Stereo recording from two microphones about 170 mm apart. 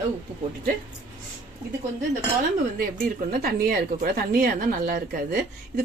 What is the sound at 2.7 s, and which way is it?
Speech, 60° right (ahead or behind).